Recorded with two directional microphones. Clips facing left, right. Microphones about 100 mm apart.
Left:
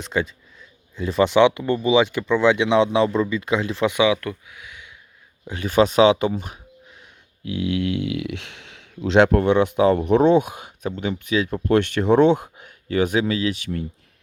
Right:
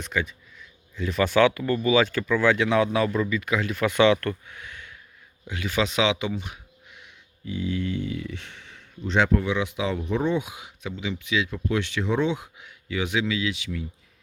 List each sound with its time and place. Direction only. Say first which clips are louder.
0.0 s speech: left 4 dB; 30° left (ahead or behind)
3.9 s speech: right 4 dB; 10° left (ahead or behind)
5.5 s speech: left 8 dB; 40° left (ahead or behind)
7.4 s speech: left 5 dB; 70° left (ahead or behind); by 10.0 s 50° left (ahead or behind)
10.0 s speech: left 9 dB; 75° left (ahead or behind); by 13.8 s 50° left (ahead or behind)